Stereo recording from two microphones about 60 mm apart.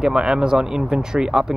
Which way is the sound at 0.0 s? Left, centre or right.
Centre.